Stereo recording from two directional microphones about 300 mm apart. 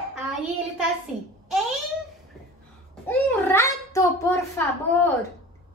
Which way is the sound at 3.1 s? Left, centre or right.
Centre.